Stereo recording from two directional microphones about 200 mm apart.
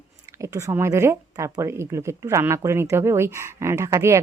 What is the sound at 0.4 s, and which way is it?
A woman's voice, 15° right (ahead or behind).